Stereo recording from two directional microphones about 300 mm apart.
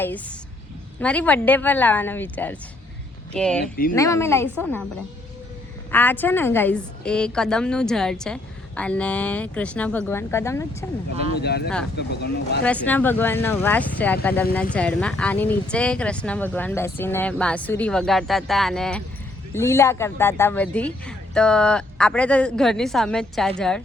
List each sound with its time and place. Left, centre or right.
0.0 s a woman's voice: centre
5.9 s a woman's voice: centre
11.3 s speech: left
12.6 s a woman's voice: centre